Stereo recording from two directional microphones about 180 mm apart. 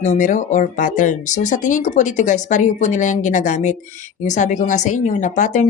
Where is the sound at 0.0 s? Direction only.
40° left (ahead or behind).